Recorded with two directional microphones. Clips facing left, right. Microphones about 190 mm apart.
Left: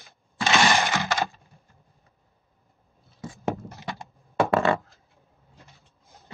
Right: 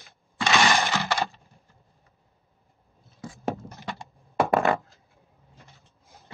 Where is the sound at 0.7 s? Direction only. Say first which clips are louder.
Left 1 dB; 15° left (ahead or behind).